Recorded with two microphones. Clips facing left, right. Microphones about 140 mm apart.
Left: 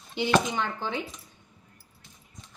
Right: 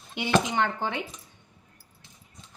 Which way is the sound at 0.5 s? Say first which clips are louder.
Right 4 dB; 65° right (ahead or behind).